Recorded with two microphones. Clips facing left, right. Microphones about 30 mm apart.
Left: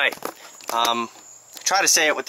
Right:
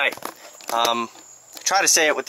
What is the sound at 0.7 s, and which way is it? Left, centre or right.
Speech, centre.